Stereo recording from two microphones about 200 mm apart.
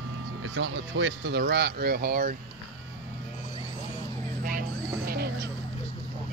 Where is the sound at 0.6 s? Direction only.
65° right (ahead or behind); by 2.3 s 45° right (ahead or behind).